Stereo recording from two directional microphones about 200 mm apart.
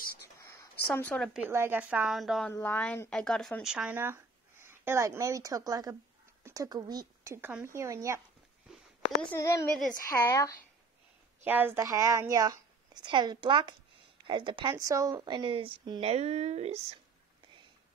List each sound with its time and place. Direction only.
0.4 s a sound: 15° left (ahead or behind)
1.5 s speech: 10° right (ahead or behind)
9.1 s a child's voice: 10° left (ahead or behind)
9.7 s a woman's voice: 5° left (ahead or behind)
11.4 s speech: 10° right (ahead or behind); by 16.8 s 35° right (ahead or behind)